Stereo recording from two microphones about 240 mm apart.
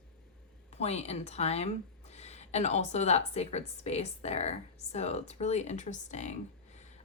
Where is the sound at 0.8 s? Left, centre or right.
Left.